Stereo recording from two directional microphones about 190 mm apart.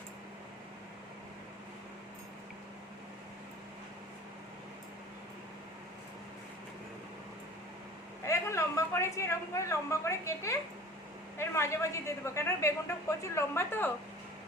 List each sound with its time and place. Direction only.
8.2 s a woman's voice: 15° left (ahead or behind)